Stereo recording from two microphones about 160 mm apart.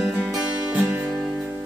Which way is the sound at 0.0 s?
Centre (ahead or behind).